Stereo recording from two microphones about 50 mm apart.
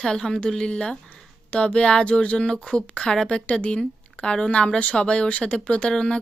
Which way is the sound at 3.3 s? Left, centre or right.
Left.